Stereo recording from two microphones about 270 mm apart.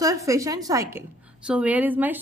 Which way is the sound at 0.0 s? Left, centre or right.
Centre.